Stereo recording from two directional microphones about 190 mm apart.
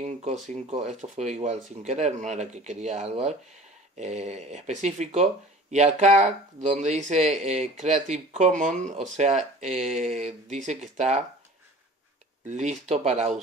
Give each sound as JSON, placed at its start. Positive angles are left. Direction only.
{"t": 0.0, "sound": "speech", "side_deg": -35}
{"t": 12.4, "sound": "speech", "side_deg": -35}